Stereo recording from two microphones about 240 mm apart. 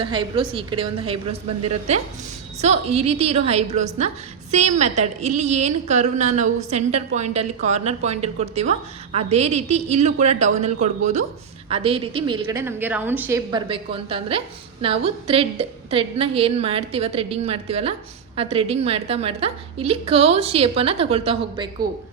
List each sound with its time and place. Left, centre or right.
0.0 s a woman's voice: centre